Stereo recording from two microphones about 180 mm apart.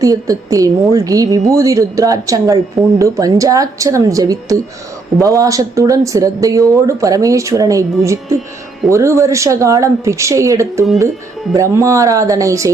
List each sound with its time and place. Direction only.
0.0 s a woman's voice: 20° right (ahead or behind)